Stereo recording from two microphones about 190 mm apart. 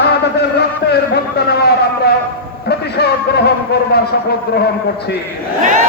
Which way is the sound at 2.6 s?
60° left (ahead or behind).